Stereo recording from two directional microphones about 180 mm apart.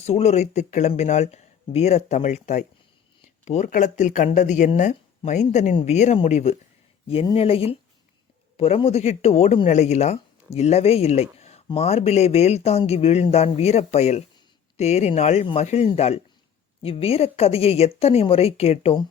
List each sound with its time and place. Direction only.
0.0 s speech: 35° left (ahead or behind)